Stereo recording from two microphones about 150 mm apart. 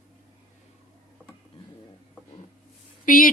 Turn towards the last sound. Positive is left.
turn(degrees=65)  # may be behind; listen again after turning